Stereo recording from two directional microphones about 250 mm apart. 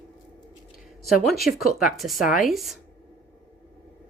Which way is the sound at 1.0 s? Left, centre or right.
Centre.